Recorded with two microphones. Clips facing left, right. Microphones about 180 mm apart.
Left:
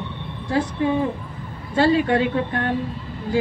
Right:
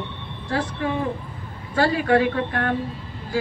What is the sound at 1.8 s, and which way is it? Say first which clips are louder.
Speech: left 1 dB; 25° left (ahead or behind).